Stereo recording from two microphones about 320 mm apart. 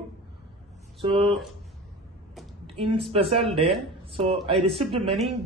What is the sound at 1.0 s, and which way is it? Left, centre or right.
Speech, centre.